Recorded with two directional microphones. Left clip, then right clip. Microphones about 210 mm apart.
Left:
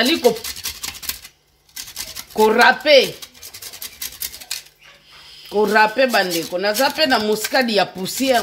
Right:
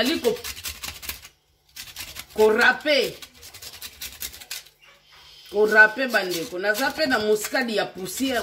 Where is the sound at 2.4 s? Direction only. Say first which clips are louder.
Left 5 dB; 40° left (ahead or behind).